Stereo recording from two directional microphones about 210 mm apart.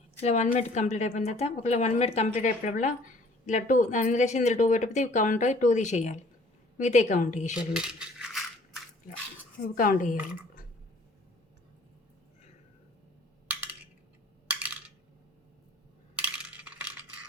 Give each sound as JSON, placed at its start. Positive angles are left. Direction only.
{"t": 0.2, "sound": "speech", "side_deg": 30}
{"t": 7.7, "sound": "rattle", "side_deg": -5}
{"t": 9.7, "sound": "speech", "side_deg": 40}
{"t": 13.5, "sound": "a sound", "side_deg": -5}
{"t": 16.1, "sound": "coin", "side_deg": -5}